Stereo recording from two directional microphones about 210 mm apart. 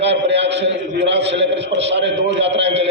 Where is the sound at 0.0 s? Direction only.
55° right (ahead or behind).